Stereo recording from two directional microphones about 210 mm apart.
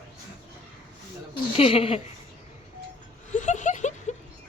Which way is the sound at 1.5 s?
25° left (ahead or behind).